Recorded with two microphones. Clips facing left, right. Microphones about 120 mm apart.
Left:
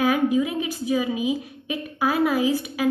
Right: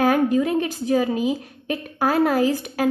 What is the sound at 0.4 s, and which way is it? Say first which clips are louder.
A woman's voice: right 3 dB; 55° right (ahead or behind).